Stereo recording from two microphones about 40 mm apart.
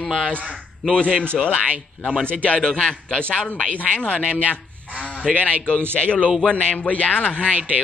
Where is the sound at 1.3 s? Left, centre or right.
Centre.